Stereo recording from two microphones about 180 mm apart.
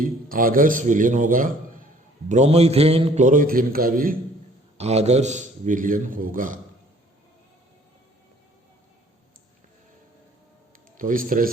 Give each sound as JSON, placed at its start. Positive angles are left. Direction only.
{"t": 0.0, "sound": "a man's voice", "side_deg": -50}
{"t": 2.3, "sound": "a man's voice", "side_deg": -40}
{"t": 4.8, "sound": "a man's voice", "side_deg": -35}
{"t": 10.9, "sound": "a man's voice", "side_deg": -50}